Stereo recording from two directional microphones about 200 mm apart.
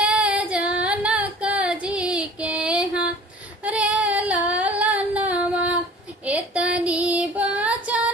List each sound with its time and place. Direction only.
0.0 s female singing: 5° right (ahead or behind)